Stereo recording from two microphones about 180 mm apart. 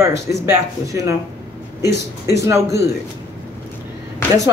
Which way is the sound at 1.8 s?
65° left (ahead or behind).